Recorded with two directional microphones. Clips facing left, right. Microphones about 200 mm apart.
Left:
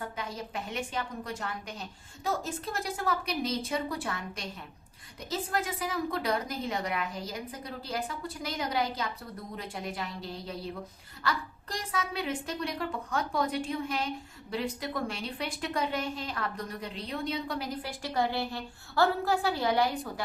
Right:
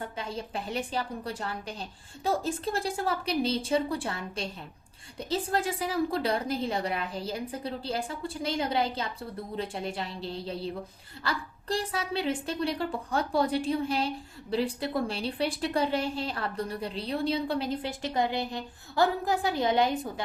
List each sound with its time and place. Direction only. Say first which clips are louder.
0.0 s a woman's voice: right 2 dB; 30° right (ahead or behind)